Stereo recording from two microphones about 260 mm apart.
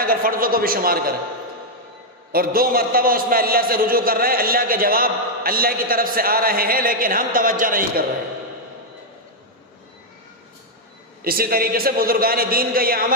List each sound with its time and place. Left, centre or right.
0.0 s a man's voice: right
2.3 s a man's voice: right
11.2 s a man's voice: right